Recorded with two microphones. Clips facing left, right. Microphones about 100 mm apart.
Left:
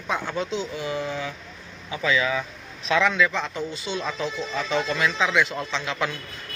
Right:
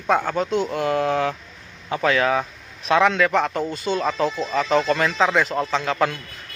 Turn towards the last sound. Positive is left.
turn(degrees=-45)  # may be behind; listen again after turning